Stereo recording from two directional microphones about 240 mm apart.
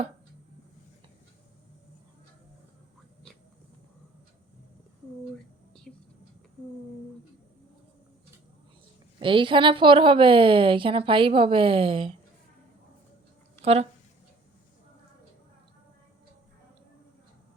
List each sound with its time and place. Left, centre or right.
5.9 s a sound: centre
9.1 s a woman's voice: right
13.6 s speech: right